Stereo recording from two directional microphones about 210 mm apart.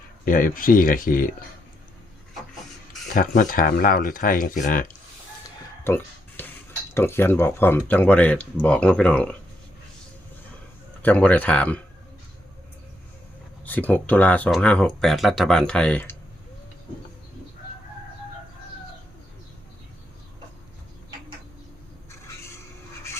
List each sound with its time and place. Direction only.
0.3 s speech: 40° left (ahead or behind)
3.1 s speech: 40° left (ahead or behind)
5.8 s a sound: 10° left (ahead or behind)
6.9 s speech: 10° left (ahead or behind)
11.0 s speech: 5° left (ahead or behind)
13.7 s speech: 10° left (ahead or behind)